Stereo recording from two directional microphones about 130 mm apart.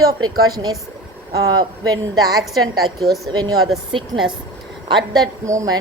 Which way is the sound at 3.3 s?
30° right (ahead or behind).